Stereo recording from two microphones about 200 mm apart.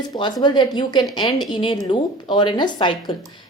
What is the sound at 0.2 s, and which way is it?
Speech, 20° left (ahead or behind).